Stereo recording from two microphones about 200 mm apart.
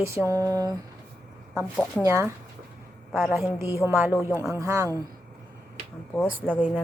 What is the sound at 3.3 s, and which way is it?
Speech, 15° right (ahead or behind).